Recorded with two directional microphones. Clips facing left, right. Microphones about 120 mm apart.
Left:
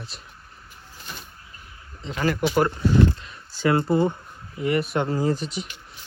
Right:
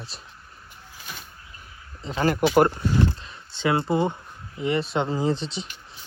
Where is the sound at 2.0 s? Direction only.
35° right (ahead or behind).